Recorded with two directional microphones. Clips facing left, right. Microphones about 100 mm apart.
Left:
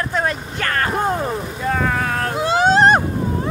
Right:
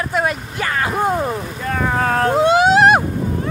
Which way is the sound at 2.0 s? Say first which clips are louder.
Right 5 dB; 35° right (ahead or behind).